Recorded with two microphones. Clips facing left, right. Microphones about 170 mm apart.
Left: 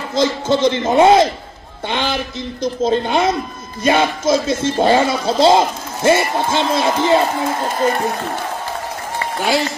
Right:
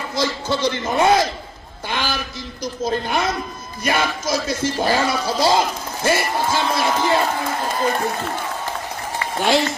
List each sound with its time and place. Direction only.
0.1 s speech: 20° left (ahead or behind)
9.4 s speech: centre (ahead or behind)